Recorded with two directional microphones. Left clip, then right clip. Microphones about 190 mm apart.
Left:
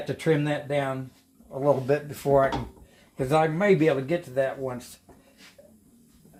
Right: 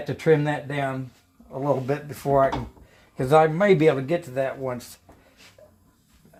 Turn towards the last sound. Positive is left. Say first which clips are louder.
# even
turn(degrees=-40)  # may be behind; listen again after turning